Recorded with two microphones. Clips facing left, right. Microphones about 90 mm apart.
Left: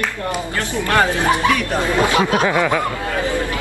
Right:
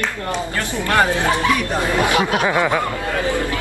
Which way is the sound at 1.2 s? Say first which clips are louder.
Left 1 dB; 20° left (ahead or behind).